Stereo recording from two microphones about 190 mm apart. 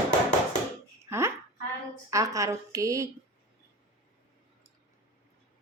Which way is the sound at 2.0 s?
15° right (ahead or behind).